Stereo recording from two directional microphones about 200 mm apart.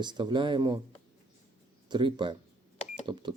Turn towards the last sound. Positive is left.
turn(degrees=-25)  # may be behind; listen again after turning